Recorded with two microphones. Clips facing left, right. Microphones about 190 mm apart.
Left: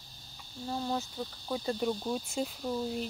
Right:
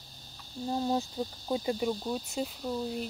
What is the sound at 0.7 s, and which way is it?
Cricket, 25° right (ahead or behind).